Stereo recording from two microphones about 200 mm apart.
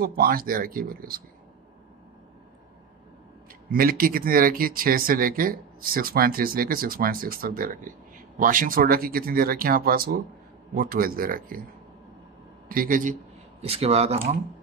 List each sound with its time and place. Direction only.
0.0 s speech: 50° right (ahead or behind)
3.7 s speech: 45° right (ahead or behind)
12.6 s speech: 45° right (ahead or behind)
13.7 s speech: 30° right (ahead or behind)